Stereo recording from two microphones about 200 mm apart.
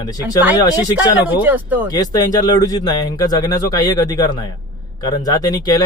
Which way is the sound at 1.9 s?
20° left (ahead or behind).